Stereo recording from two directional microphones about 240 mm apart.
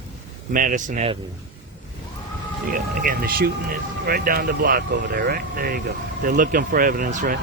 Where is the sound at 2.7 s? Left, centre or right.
Right.